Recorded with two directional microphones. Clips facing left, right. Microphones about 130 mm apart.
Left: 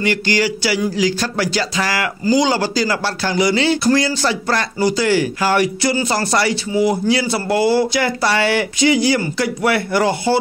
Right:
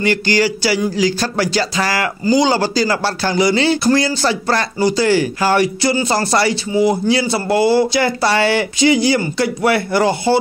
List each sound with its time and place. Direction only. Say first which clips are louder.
0.0 s speech: right 2 dB; 35° right (ahead or behind)